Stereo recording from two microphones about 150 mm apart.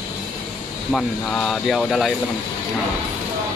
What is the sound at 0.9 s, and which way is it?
Speech, 5° left (ahead or behind).